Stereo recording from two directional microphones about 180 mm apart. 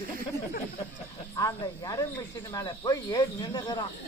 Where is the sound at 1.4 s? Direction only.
20° left (ahead or behind).